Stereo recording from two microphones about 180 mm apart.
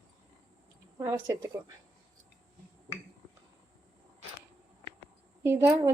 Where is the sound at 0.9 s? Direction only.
15° right (ahead or behind).